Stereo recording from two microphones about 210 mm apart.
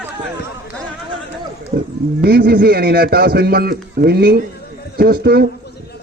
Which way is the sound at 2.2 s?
45° right (ahead or behind).